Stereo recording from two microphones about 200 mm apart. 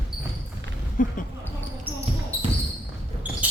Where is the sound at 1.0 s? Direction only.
40° left (ahead or behind).